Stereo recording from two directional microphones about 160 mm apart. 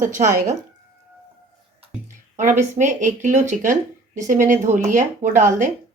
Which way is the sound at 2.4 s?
50° right (ahead or behind).